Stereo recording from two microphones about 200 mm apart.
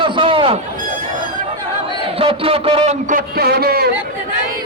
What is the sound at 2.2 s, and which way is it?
A man's voice, 25° right (ahead or behind).